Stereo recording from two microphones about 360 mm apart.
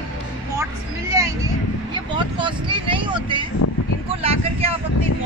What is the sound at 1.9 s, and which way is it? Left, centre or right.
Vehicle, centre.